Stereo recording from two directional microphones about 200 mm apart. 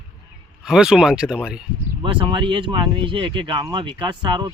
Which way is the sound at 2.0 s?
25° right (ahead or behind).